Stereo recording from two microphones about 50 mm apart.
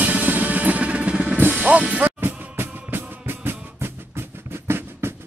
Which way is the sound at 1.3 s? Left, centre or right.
Right.